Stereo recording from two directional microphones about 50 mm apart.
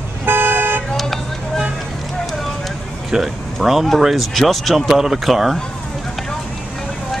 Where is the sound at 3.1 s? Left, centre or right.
Centre.